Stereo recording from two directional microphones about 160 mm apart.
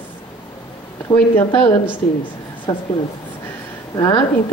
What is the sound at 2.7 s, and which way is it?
Speech, 25° left (ahead or behind).